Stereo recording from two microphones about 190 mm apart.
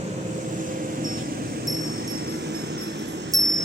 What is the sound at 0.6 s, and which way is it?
Wind chime, 45° right (ahead or behind).